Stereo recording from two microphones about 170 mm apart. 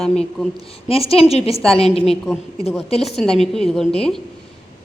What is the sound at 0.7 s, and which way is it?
Speech, 35° left (ahead or behind).